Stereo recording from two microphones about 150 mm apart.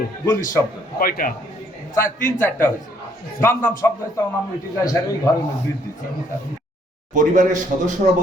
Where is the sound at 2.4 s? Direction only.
15° left (ahead or behind).